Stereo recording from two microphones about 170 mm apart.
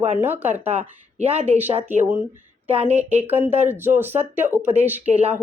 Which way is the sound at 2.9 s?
40° right (ahead or behind).